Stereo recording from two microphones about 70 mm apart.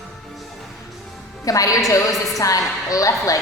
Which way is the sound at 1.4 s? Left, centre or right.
Left.